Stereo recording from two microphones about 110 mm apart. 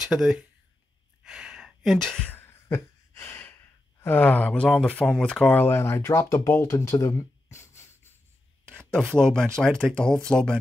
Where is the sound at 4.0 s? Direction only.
15° left (ahead or behind).